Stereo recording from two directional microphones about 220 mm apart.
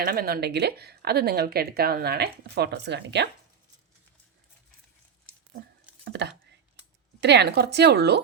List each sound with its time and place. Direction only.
0.0 s speech: 45° right (ahead or behind)
6.2 s speech: 50° right (ahead or behind)